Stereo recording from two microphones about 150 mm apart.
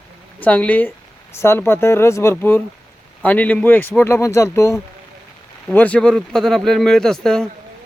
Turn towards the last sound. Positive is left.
turn(degrees=5)  # may be behind; listen again after turning